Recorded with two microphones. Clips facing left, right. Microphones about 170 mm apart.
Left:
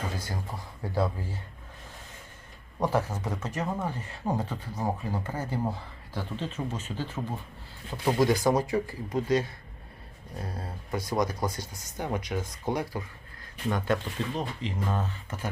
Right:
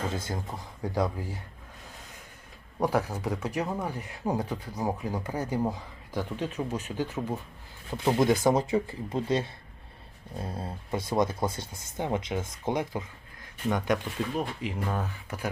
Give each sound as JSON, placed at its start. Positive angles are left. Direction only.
{"t": 0.1, "sound": "speech", "side_deg": -20}
{"t": 2.8, "sound": "speech", "side_deg": -10}